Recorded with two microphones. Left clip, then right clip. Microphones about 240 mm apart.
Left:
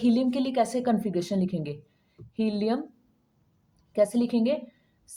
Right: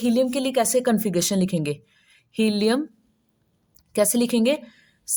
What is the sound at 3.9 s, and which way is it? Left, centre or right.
A woman's voice, right.